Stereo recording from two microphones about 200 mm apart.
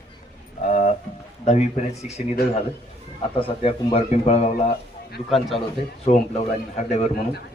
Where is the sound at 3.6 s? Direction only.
30° left (ahead or behind).